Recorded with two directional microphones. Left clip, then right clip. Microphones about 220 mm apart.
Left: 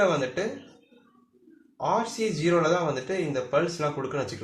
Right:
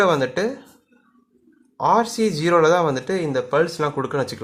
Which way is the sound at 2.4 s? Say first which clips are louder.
Right 8 dB; 45° right (ahead or behind).